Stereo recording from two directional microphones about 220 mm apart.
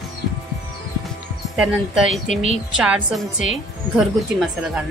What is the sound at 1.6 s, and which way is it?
Speech, 5° right (ahead or behind).